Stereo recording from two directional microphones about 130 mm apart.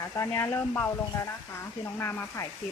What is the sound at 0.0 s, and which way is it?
Speech, 20° left (ahead or behind).